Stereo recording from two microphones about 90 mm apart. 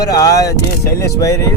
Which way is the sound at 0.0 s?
40° left (ahead or behind).